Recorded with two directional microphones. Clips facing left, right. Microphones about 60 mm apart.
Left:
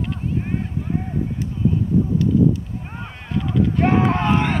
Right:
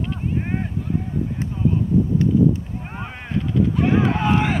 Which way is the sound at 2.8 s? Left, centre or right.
Centre.